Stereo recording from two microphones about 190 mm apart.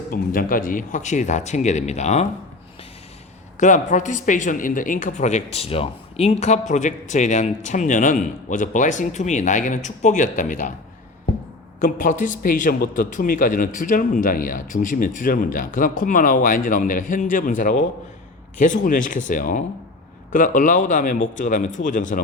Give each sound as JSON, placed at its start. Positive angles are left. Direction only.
{"t": 0.1, "sound": "speech", "side_deg": 45}
{"t": 3.6, "sound": "speech", "side_deg": 40}
{"t": 11.8, "sound": "a man's voice", "side_deg": 45}